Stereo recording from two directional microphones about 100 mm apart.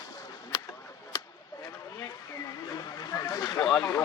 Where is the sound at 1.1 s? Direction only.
35° left (ahead or behind).